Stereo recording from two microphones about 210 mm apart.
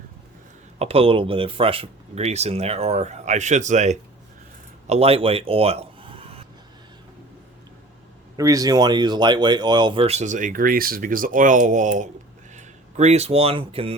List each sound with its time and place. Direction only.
0.8 s speech: 25° right (ahead or behind)
8.4 s speech: 15° right (ahead or behind)